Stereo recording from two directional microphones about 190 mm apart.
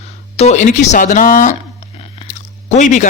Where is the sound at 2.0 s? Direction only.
35° left (ahead or behind).